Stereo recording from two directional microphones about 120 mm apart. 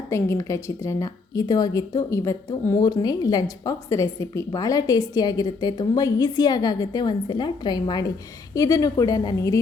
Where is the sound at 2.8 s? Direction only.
35° left (ahead or behind).